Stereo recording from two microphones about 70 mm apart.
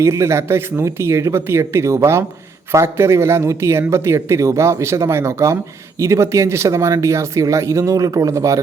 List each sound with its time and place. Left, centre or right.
0.0 s speech: right